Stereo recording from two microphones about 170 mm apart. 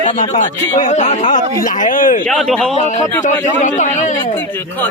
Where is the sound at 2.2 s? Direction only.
5° left (ahead or behind).